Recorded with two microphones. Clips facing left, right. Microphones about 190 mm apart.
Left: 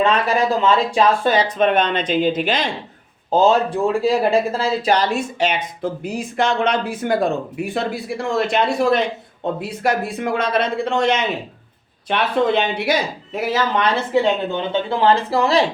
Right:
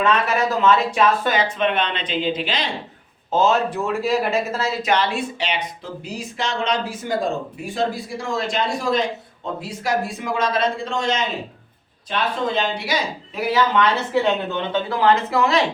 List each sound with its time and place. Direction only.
0.0 s speech: 30° left (ahead or behind); by 2.6 s 50° left (ahead or behind)
3.3 s speech: 30° left (ahead or behind); by 13.0 s 60° left (ahead or behind)
14.1 s speech: 20° left (ahead or behind)